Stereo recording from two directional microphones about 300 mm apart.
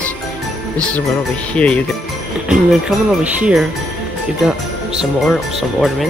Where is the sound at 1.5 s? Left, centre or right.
Centre.